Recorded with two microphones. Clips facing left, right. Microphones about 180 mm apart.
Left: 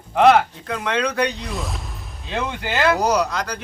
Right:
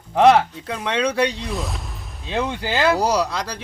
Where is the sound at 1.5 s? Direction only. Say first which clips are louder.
Right 1 dB; centre (ahead or behind).